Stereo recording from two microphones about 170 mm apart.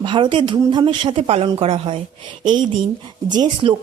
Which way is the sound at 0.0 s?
30° right (ahead or behind).